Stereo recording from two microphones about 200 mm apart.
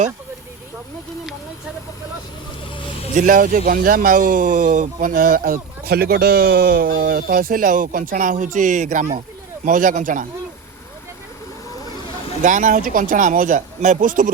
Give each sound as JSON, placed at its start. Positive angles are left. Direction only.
{"t": 3.2, "sound": "speech", "side_deg": -40}
{"t": 12.4, "sound": "speech", "side_deg": -40}